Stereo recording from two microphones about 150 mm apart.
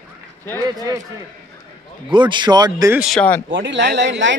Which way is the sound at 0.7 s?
25° right (ahead or behind).